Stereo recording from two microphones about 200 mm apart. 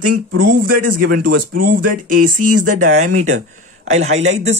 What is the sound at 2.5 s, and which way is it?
Speech, 90° right.